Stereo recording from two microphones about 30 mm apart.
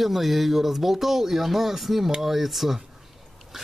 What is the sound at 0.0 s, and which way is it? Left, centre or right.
Speech, centre.